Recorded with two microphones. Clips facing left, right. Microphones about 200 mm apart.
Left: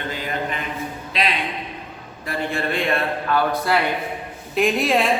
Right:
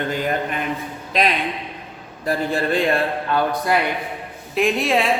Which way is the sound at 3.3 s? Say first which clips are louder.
Right 1 dB; 15° right (ahead or behind).